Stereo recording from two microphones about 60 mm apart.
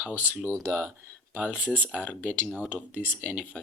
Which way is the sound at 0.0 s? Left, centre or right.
Right.